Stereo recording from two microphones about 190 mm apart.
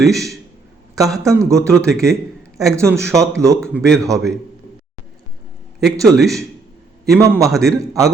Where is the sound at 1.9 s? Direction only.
Centre (ahead or behind).